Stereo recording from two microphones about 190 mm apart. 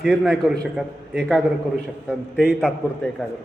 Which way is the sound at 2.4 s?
Centre (ahead or behind).